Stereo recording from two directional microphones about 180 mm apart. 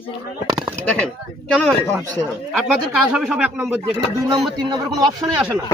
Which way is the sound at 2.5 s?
5° right (ahead or behind).